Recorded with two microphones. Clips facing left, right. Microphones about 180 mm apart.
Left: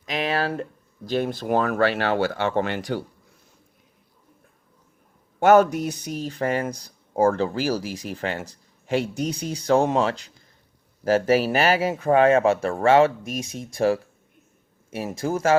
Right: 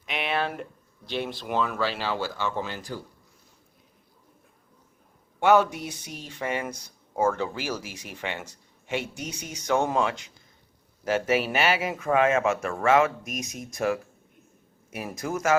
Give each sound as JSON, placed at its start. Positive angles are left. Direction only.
{"t": 0.1, "sound": "a sound", "side_deg": 35}
{"t": 1.0, "sound": "speech", "side_deg": 45}
{"t": 5.4, "sound": "speech", "side_deg": 45}